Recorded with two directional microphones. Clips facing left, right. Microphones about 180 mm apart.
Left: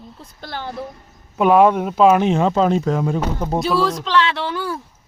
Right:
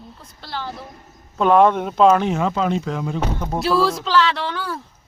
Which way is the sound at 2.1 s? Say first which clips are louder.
Left 3 dB; 20° left (ahead or behind).